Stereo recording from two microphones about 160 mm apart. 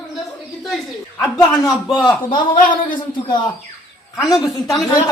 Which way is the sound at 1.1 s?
15° left (ahead or behind).